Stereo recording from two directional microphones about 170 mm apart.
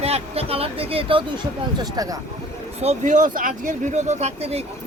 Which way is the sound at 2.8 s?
45° right (ahead or behind).